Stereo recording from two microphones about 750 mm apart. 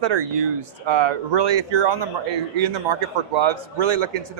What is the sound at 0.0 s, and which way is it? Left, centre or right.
Speech, right.